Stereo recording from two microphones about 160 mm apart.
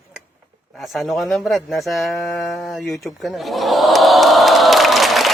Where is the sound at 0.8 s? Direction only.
Centre (ahead or behind).